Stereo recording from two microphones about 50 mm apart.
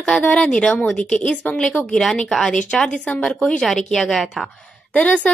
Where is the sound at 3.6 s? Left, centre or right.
Centre.